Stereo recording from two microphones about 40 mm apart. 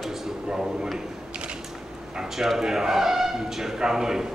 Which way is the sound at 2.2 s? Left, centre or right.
Centre.